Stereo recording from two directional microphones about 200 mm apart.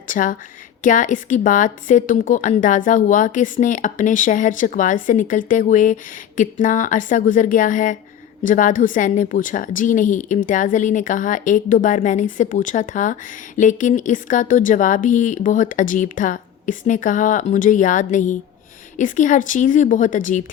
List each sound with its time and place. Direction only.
0.1 s a woman's voice: 40° left (ahead or behind)